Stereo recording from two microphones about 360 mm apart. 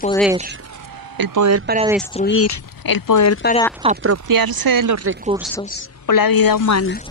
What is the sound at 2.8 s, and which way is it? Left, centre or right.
Speech, left.